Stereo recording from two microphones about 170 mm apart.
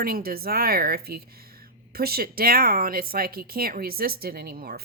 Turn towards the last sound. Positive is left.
turn(degrees=-60)  # may be behind; listen again after turning